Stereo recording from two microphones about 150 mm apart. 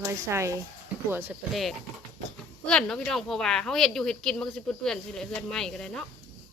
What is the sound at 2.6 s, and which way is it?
Speech, 5° left (ahead or behind).